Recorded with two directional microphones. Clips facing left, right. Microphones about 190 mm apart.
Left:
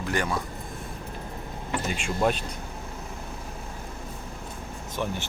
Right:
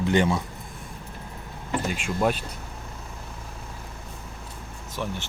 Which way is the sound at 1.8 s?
Centre (ahead or behind).